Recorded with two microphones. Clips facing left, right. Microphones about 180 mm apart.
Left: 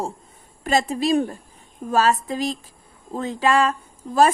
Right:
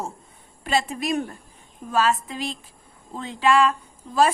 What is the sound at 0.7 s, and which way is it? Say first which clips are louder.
Speech: left 4 dB; 40° left (ahead or behind).